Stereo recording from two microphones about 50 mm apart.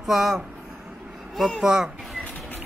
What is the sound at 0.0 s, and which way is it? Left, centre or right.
Speech, centre.